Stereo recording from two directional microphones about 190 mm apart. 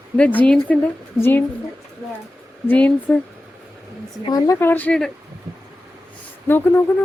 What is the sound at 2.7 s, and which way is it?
Speech, 10° left (ahead or behind).